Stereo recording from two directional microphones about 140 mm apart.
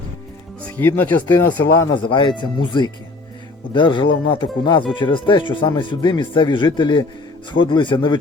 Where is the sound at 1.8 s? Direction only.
35° left (ahead or behind).